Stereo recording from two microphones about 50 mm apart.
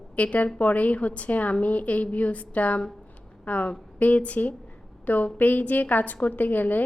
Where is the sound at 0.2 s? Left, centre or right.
Left.